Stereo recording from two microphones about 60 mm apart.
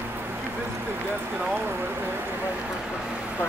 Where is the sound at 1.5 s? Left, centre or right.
Right.